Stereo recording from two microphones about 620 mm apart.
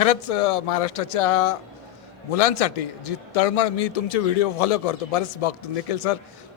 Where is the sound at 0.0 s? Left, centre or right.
Left.